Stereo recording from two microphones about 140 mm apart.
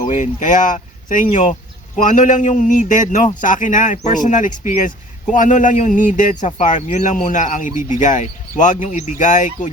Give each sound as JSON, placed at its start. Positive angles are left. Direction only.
{"t": 0.0, "sound": "speech", "side_deg": 60}